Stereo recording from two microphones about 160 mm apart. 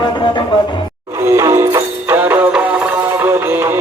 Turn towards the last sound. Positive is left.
turn(degrees=-15)  # may be behind; listen again after turning